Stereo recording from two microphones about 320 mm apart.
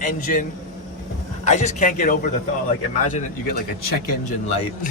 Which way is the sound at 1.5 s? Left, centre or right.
Left.